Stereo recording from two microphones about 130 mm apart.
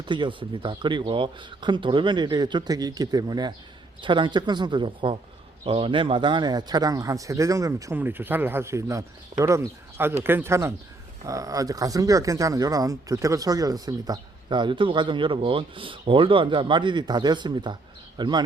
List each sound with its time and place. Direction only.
0.0 s speech: 35° right (ahead or behind)